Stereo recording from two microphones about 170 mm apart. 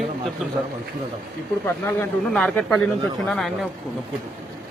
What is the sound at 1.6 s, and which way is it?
A man's voice, 10° left (ahead or behind).